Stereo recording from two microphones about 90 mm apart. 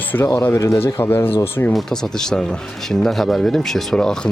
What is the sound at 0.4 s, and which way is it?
Speech, 25° left (ahead or behind).